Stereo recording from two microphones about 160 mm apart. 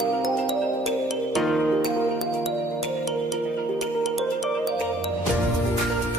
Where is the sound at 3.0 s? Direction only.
Centre (ahead or behind).